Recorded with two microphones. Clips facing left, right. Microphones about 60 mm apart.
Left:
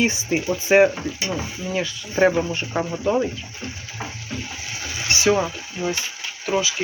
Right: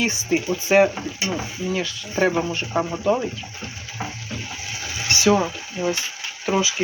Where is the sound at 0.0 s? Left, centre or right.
Centre.